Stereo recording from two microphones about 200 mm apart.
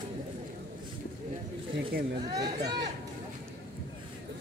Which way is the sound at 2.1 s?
20° right (ahead or behind).